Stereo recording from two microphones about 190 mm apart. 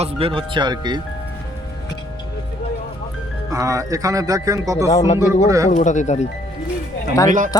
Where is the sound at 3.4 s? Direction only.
15° right (ahead or behind).